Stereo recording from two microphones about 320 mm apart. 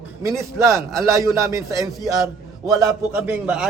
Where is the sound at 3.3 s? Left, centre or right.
Centre.